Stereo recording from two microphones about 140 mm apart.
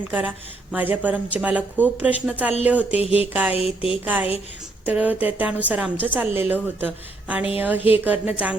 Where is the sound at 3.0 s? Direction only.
45° left (ahead or behind).